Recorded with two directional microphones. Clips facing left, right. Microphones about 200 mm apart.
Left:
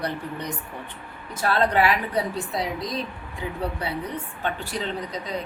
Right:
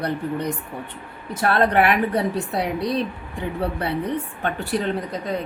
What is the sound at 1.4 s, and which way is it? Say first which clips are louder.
Speech: right 3 dB; 60° right (ahead or behind).